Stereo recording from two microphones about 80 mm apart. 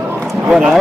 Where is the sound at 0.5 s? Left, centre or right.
Centre.